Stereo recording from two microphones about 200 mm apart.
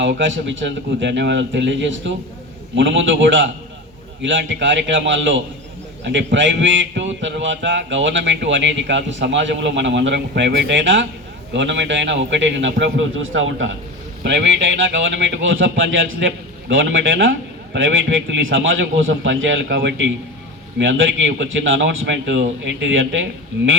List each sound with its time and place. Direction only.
0.0 s a man's voice: 65° right (ahead or behind)
14.9 s a man's voice: 65° right (ahead or behind)